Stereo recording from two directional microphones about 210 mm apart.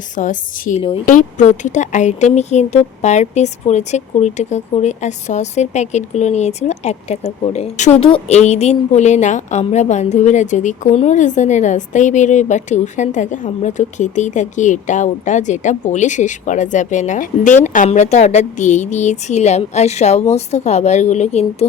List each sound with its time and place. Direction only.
0.2 s speech: 40° left (ahead or behind)